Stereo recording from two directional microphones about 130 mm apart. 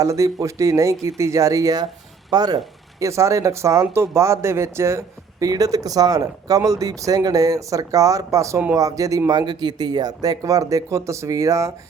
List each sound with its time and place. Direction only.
0.0 s speech: 25° right (ahead or behind)